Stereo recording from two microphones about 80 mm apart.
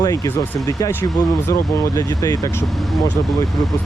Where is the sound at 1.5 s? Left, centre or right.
Left.